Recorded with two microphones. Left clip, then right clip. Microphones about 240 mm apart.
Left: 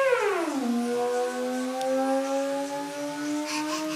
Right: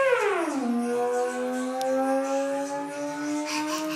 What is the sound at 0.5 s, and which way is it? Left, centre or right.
Music, left.